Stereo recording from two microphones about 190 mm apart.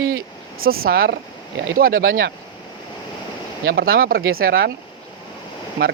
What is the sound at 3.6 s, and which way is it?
Speech, 60° right (ahead or behind).